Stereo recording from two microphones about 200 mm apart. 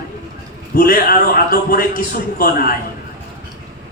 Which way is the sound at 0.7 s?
45° left (ahead or behind).